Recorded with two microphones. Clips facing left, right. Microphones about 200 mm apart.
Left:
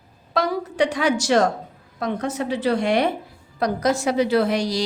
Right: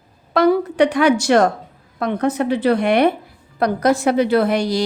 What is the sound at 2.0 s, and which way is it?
A woman's voice, 60° right (ahead or behind).